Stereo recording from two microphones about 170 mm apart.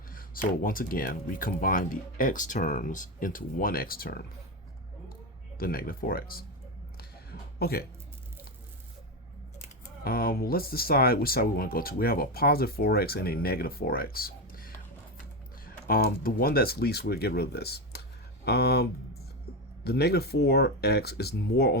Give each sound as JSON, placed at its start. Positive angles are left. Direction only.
{"t": 0.1, "sound": "speech", "side_deg": 55}
{"t": 5.5, "sound": "speech", "side_deg": 60}
{"t": 7.6, "sound": "speech", "side_deg": 65}
{"t": 10.0, "sound": "speech", "side_deg": 60}